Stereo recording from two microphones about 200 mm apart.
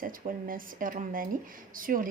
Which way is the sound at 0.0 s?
45° right (ahead or behind).